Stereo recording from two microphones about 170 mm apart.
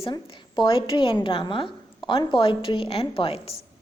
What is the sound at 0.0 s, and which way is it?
A woman's voice, 30° left (ahead or behind).